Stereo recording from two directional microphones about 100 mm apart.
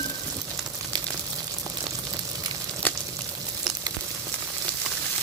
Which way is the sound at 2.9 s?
20° left (ahead or behind).